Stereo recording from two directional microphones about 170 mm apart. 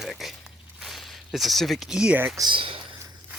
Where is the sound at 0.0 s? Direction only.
Centre (ahead or behind).